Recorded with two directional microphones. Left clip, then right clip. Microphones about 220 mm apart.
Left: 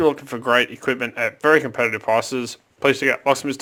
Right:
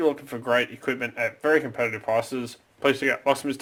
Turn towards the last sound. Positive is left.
turn(degrees=25)  # may be behind; listen again after turning